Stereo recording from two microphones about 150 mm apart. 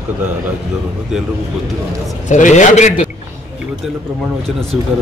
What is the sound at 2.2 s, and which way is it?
Speech, 55° left (ahead or behind).